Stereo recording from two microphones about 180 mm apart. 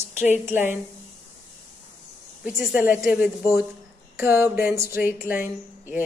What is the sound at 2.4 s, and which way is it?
Speech, 5° right (ahead or behind).